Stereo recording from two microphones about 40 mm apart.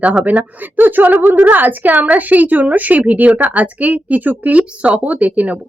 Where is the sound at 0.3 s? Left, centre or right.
Right.